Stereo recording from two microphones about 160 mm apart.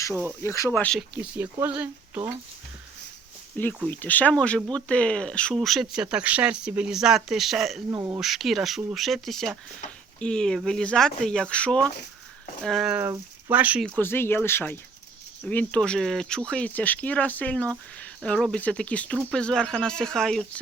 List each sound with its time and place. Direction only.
0.1 s speech: 15° right (ahead or behind)
0.4 s speech: 15° left (ahead or behind)
0.9 s speech: 5° right (ahead or behind)
3.8 s speech: 10° left (ahead or behind)
7.9 s speech: 20° right (ahead or behind)
8.2 s speech: centre (ahead or behind)
13.0 s speech: 10° right (ahead or behind)
13.8 s speech: 10° left (ahead or behind)